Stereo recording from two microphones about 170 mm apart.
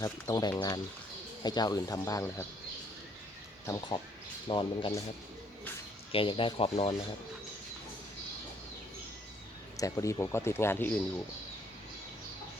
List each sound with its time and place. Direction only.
0.0 s speech: 20° left (ahead or behind)
3.7 s speech: 25° left (ahead or behind)
6.1 s speech: 30° left (ahead or behind)
9.7 s speech: 20° left (ahead or behind)